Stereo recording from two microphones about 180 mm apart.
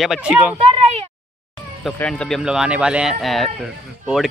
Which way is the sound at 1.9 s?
5° left (ahead or behind).